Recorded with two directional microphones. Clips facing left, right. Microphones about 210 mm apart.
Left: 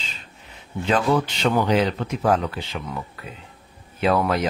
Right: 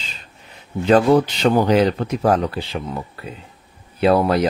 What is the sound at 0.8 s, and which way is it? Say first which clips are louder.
Speech: right 7 dB; 35° right (ahead or behind).